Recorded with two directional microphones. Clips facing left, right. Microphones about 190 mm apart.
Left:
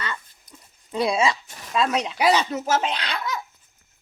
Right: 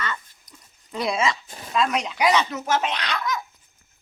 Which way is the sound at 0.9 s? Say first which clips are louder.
Left 2 dB; 30° left (ahead or behind).